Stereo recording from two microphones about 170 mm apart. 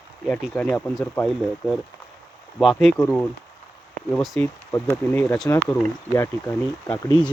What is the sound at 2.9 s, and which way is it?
Speech, 15° left (ahead or behind).